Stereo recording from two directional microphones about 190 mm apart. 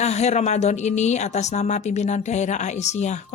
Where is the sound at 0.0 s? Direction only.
35° left (ahead or behind).